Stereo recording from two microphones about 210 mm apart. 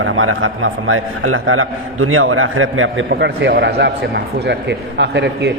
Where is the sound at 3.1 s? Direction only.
55° right (ahead or behind).